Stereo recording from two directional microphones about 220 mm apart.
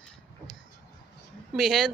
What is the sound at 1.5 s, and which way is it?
Speech, centre (ahead or behind).